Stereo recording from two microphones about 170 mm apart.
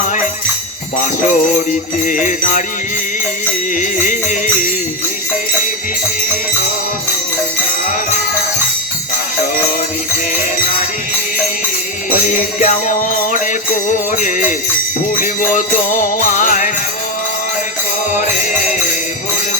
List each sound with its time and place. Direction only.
2.0 s jingle bell: 50° left (ahead or behind)
3.8 s jingle bell: 50° left (ahead or behind)
12.1 s jingle bell: 45° left (ahead or behind)